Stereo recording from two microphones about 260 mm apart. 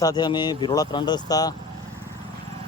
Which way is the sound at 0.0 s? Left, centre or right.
Centre.